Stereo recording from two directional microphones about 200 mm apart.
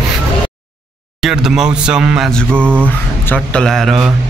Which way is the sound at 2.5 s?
10° right (ahead or behind).